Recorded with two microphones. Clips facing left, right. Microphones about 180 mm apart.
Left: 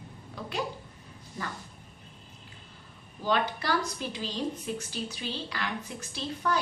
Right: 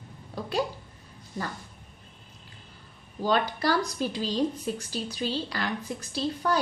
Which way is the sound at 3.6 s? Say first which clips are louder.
Right 4 dB; 35° right (ahead or behind).